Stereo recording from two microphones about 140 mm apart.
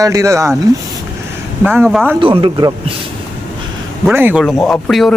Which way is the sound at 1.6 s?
15° right (ahead or behind).